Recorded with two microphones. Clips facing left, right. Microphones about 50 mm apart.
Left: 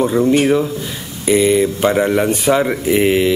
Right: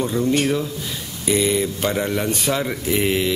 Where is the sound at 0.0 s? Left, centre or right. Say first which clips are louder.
Left 6 dB; centre.